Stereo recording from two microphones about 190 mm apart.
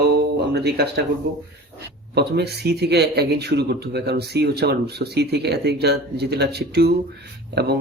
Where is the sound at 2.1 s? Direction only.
60° right (ahead or behind).